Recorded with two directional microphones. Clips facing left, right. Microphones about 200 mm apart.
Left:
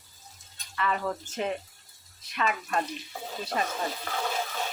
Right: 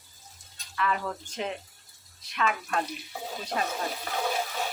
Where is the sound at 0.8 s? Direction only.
Centre (ahead or behind).